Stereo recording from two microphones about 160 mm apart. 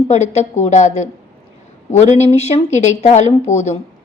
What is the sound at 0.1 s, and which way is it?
A woman's voice, 45° left (ahead or behind).